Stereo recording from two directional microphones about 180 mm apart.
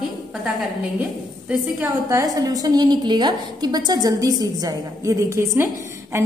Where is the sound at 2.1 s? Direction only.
20° right (ahead or behind).